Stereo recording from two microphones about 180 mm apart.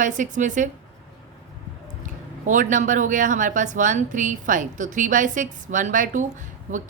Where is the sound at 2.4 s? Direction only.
45° right (ahead or behind).